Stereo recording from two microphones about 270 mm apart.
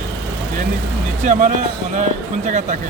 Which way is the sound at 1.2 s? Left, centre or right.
Right.